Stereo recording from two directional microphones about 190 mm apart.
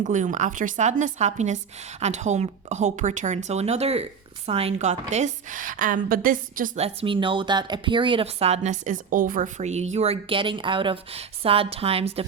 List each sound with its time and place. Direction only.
0.0 s a woman's voice: 40° right (ahead or behind)
6.7 s speech: 30° right (ahead or behind)